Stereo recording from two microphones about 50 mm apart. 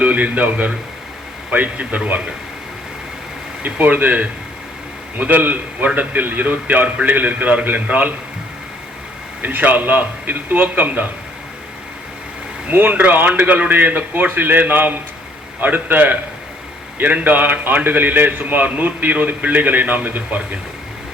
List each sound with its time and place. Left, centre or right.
0.0 s a man's voice: right
3.6 s a man's voice: right
9.4 s a man's voice: right
12.7 s a man's voice: right
17.2 s a man's voice: right